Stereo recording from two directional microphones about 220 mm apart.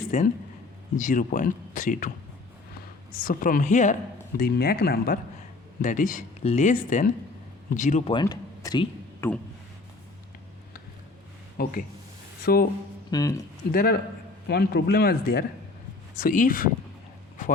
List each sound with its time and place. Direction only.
0.1 s speech: 35° left (ahead or behind)
3.2 s speech: 40° left (ahead or behind)
4.4 s a man's voice: 45° left (ahead or behind)
8.1 s a sound: 15° left (ahead or behind)
11.5 s a man's voice: 40° left (ahead or behind)
13.1 s speech: 15° left (ahead or behind)
13.7 s a man's voice: 40° left (ahead or behind)